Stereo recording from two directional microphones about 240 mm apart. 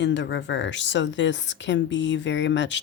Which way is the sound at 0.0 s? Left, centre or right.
Left.